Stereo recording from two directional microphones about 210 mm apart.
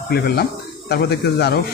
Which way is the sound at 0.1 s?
50° left (ahead or behind).